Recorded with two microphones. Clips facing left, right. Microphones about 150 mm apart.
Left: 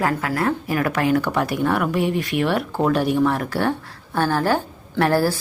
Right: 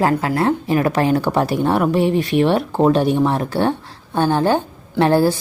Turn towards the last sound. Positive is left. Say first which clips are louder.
# right 4 dB
turn(degrees=-20)  # may be behind; listen again after turning